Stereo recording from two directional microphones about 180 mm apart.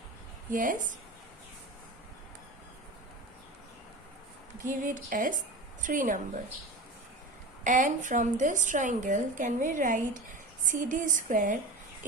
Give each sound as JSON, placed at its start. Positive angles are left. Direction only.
{"t": 0.5, "sound": "a woman's voice", "side_deg": -45}
{"t": 4.6, "sound": "a woman's voice", "side_deg": -50}
{"t": 7.6, "sound": "a woman's voice", "side_deg": -45}